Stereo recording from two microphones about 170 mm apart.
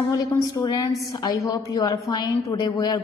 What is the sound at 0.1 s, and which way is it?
A woman's voice, 20° left (ahead or behind).